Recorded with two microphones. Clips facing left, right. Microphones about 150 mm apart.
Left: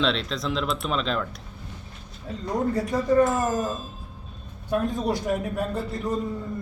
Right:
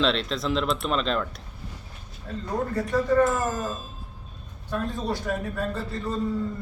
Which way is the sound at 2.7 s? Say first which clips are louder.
Even; 15° left (ahead or behind).